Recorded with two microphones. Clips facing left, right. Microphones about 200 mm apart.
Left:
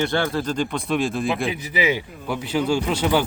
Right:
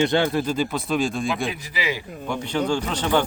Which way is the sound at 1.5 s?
20° left (ahead or behind).